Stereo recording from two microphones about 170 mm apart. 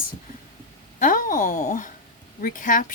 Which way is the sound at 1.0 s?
50° left (ahead or behind).